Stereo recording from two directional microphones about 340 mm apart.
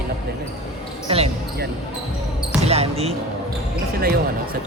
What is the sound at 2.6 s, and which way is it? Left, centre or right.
Basketball bounce, centre.